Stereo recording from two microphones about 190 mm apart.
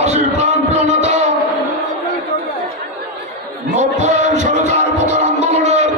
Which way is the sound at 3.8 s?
35° right (ahead or behind).